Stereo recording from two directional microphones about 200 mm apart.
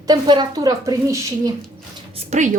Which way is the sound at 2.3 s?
35° right (ahead or behind).